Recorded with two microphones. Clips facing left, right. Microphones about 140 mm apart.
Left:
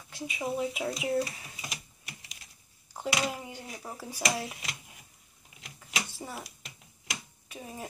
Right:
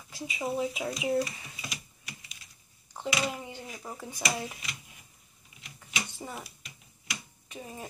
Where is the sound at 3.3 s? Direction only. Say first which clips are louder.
Even; 10° left (ahead or behind).